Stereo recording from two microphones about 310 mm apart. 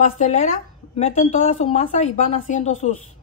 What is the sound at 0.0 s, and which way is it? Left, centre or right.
Speech, left.